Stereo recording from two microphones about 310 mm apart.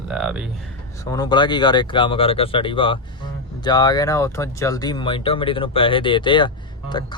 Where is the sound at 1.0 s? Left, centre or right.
Centre.